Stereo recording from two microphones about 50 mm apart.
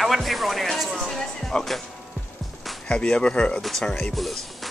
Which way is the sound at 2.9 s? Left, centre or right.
Centre.